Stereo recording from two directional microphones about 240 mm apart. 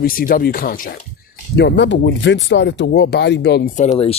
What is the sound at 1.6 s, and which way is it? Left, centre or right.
Speech, left.